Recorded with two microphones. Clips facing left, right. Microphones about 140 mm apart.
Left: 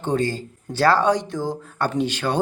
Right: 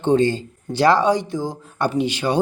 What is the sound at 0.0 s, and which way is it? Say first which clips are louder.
A man's voice: right 6 dB; 25° right (ahead or behind).